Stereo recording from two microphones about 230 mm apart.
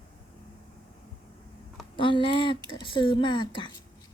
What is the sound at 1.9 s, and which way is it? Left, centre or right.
Speech, left.